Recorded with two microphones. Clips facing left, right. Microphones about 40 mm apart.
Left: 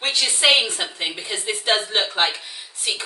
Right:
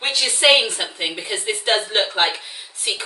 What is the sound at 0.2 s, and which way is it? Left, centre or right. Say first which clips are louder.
A woman's voice: right 3 dB; centre.